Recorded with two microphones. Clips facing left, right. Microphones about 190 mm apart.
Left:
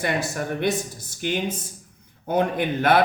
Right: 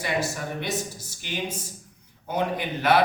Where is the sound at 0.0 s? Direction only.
55° left (ahead or behind).